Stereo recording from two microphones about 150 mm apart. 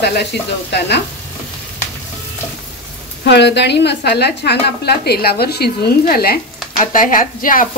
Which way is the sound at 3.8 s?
90° left.